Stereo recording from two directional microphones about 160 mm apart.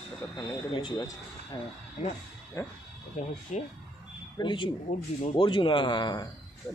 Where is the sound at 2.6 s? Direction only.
15° left (ahead or behind).